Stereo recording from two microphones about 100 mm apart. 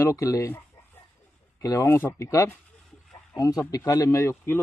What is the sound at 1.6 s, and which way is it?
Speech, 35° left (ahead or behind).